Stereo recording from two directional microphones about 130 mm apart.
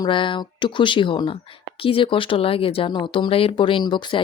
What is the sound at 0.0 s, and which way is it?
Speech, 40° left (ahead or behind).